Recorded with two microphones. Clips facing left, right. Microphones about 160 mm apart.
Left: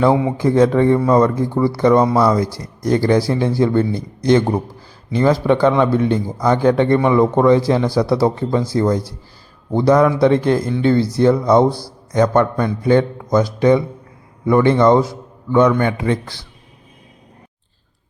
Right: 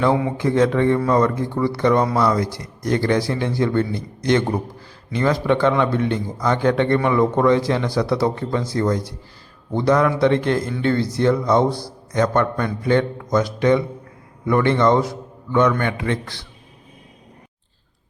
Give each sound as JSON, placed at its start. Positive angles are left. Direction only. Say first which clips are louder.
{"t": 0.1, "sound": "a man's voice", "louder": "left 4 dB", "side_deg": 25}